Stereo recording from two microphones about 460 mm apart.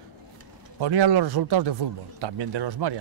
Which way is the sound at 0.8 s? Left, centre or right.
Right.